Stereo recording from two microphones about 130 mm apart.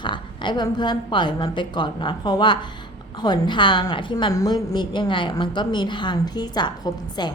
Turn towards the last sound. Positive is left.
turn(degrees=35)  # may be behind; listen again after turning